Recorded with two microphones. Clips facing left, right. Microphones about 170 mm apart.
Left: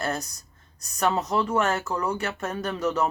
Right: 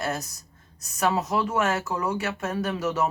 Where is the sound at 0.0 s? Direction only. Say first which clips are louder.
Even; centre (ahead or behind).